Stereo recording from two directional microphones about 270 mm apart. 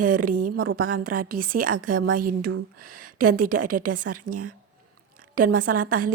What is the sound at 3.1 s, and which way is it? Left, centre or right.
A woman's voice, right.